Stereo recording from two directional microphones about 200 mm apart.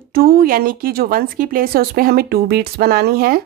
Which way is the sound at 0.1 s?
45° right (ahead or behind).